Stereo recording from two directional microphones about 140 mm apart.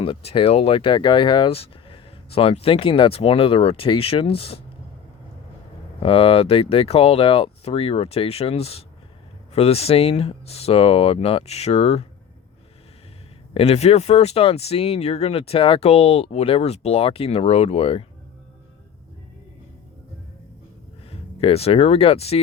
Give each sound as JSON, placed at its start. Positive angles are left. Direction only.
{"t": 0.0, "sound": "speech", "side_deg": 40}
{"t": 6.0, "sound": "speech", "side_deg": 40}
{"t": 13.5, "sound": "speech", "side_deg": 45}
{"t": 21.1, "sound": "speech", "side_deg": 45}